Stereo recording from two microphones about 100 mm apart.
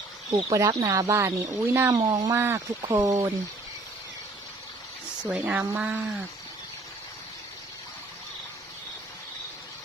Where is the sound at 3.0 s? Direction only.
35° right (ahead or behind).